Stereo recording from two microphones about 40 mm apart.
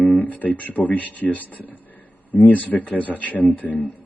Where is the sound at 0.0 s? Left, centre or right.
Left.